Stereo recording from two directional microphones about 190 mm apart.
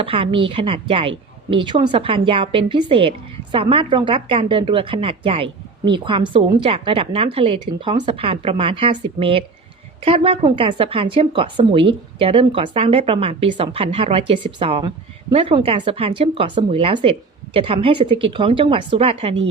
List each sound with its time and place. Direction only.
0.0 s a woman's voice: 30° right (ahead or behind)